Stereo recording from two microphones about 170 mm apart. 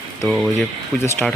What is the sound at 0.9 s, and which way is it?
Speech, 15° left (ahead or behind).